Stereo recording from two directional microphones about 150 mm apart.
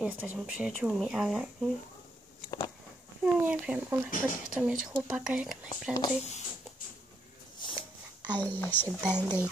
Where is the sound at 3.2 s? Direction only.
10° right (ahead or behind).